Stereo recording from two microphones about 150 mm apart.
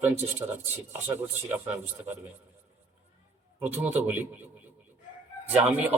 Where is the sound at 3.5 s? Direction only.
15° right (ahead or behind).